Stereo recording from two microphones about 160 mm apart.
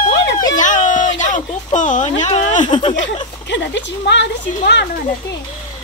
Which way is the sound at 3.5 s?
90° left.